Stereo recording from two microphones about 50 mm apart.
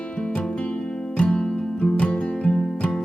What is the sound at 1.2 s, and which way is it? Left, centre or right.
Music, centre.